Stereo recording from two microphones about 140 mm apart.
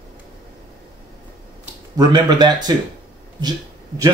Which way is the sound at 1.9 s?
30° right (ahead or behind).